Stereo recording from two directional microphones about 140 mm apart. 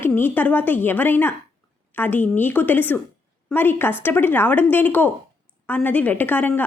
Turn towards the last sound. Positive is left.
turn(degrees=15)  # may be behind; listen again after turning